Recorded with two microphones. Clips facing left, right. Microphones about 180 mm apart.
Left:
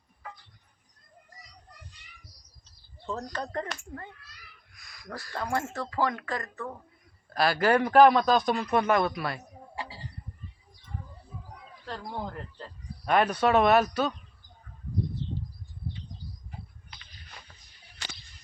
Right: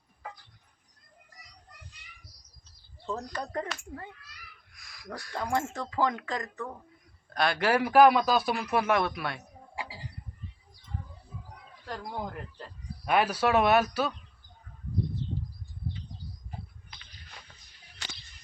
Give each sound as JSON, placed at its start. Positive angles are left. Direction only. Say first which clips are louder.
{"t": 3.1, "sound": "speech", "louder": "left 1 dB", "side_deg": -10}
{"t": 4.7, "sound": "a sound", "louder": "even", "side_deg": 0}
{"t": 5.7, "sound": "speech", "louder": "even", "side_deg": -20}
{"t": 7.3, "sound": "a man's voice", "louder": "left 2 dB", "side_deg": 5}
{"t": 9.8, "sound": "a sound", "louder": "left 1 dB", "side_deg": -10}
{"t": 11.9, "sound": "a man's voice", "louder": "even", "side_deg": -10}